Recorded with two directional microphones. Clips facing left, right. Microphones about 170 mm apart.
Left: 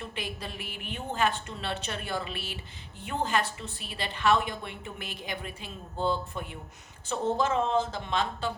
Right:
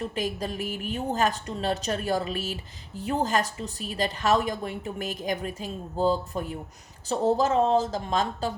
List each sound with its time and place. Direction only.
0.0 s a woman's voice: 40° right (ahead or behind)